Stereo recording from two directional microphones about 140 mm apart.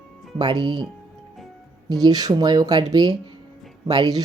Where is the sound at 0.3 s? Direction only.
35° right (ahead or behind).